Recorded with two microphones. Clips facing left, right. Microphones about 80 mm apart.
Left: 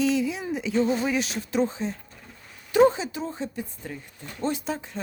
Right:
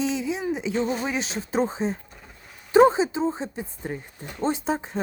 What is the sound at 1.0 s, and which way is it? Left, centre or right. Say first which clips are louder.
Speech: left 2 dB; right.